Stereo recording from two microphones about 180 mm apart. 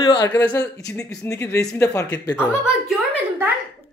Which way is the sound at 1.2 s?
15° left (ahead or behind).